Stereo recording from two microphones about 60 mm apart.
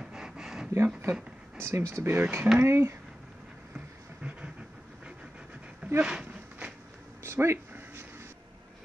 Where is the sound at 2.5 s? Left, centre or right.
Right.